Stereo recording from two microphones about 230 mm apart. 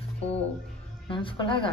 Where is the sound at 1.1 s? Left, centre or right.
Left.